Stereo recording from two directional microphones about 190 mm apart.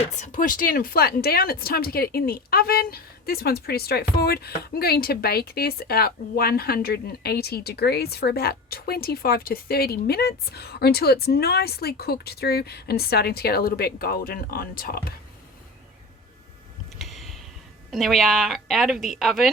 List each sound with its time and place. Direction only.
0.1 s a woman's voice: 40° left (ahead or behind)
17.0 s a sound: centre (ahead or behind)
17.9 s speech: centre (ahead or behind)